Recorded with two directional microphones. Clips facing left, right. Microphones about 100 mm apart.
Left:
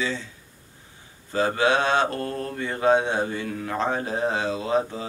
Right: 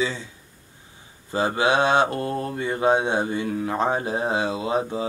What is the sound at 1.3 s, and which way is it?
Mantra, 15° right (ahead or behind).